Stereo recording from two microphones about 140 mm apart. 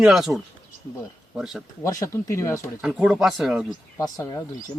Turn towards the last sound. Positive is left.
turn(degrees=30)  # may be behind; listen again after turning